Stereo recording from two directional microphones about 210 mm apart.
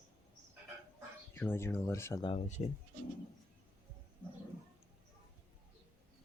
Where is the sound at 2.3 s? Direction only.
30° left (ahead or behind).